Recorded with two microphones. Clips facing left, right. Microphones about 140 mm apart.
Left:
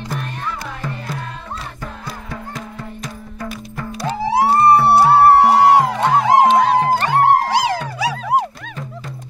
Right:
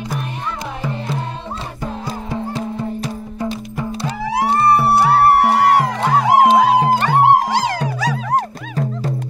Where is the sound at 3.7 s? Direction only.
15° right (ahead or behind).